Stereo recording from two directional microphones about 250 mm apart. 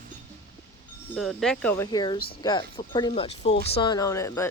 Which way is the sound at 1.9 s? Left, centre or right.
Centre.